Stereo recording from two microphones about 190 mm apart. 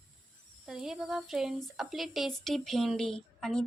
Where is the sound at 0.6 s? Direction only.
Centre (ahead or behind).